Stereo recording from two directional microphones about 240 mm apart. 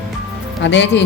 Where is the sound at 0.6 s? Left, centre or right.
Left.